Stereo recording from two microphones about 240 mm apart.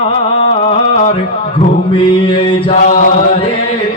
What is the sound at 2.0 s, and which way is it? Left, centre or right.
Mantra, left.